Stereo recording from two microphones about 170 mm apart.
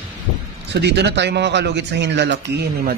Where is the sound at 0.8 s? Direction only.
85° right.